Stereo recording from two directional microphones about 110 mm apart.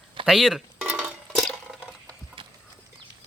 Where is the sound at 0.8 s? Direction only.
15° right (ahead or behind).